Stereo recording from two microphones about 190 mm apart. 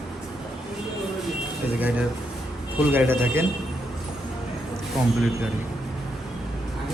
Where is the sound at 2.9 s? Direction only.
10° right (ahead or behind).